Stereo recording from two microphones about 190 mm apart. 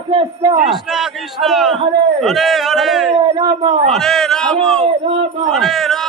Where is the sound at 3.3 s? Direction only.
25° right (ahead or behind).